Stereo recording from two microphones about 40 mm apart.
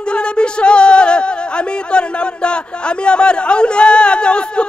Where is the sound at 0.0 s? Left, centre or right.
Left.